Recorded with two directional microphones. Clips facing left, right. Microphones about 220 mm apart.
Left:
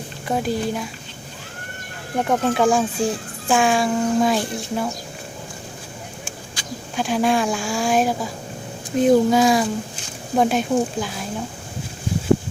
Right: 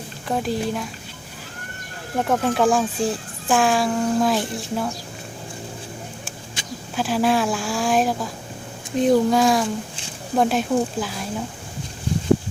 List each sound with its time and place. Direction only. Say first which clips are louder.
0.3 s speech: left 1 dB; centre (ahead or behind)
2.1 s speech: left 1 dB; centre (ahead or behind)
6.6 s a sound: even; 25° right (ahead or behind)
6.9 s speech: even; centre (ahead or behind)